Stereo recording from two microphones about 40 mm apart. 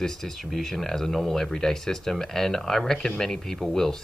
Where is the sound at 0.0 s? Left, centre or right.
Centre.